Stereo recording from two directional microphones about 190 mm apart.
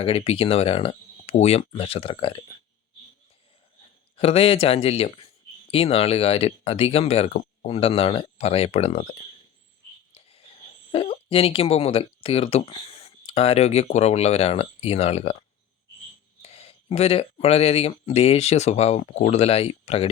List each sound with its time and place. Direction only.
0.0 s speech: 30° left (ahead or behind)
4.2 s speech: 30° left (ahead or behind)
10.2 s a sound: 30° left (ahead or behind)
10.9 s speech: 30° left (ahead or behind)